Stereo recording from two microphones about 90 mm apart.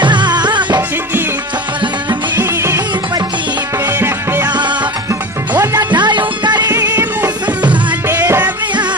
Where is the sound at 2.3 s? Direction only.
25° right (ahead or behind).